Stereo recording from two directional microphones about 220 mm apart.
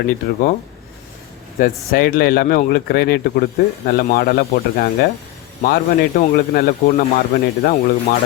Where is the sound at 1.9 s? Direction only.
45° left (ahead or behind).